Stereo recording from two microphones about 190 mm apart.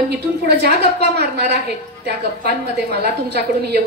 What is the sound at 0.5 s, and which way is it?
A woman's voice, 60° right (ahead or behind).